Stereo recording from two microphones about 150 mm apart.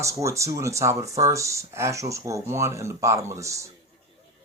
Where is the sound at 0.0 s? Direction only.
20° right (ahead or behind).